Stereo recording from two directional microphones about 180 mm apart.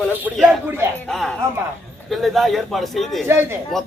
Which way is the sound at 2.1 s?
Centre (ahead or behind).